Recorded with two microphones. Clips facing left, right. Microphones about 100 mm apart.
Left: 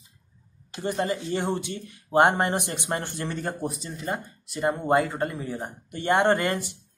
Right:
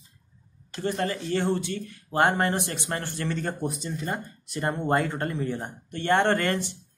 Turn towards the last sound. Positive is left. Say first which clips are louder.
# left 1 dB
turn(degrees=15)  # may be behind; listen again after turning